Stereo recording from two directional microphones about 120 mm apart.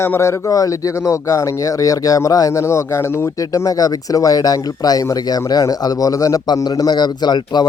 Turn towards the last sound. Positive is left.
turn(degrees=35)  # may be behind; listen again after turning